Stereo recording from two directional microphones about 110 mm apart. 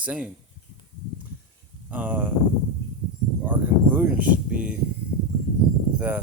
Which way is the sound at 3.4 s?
15° right (ahead or behind).